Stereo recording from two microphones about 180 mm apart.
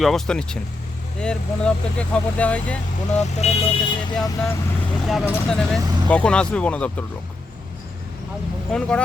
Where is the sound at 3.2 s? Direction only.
35° left (ahead or behind).